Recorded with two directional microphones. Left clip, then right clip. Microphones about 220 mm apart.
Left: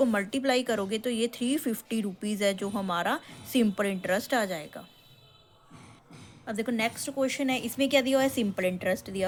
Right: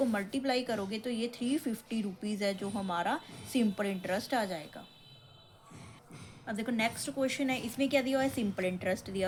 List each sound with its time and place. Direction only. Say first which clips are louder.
0.0 s speech: left 6 dB; 35° left (ahead or behind)
6.4 s a woman's voice: left 3 dB; 25° left (ahead or behind)